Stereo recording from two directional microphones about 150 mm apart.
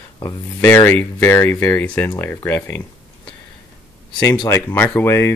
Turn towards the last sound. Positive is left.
turn(degrees=15)  # may be behind; listen again after turning